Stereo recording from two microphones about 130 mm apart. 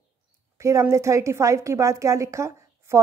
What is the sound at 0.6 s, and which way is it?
A woman's voice, 25° right (ahead or behind).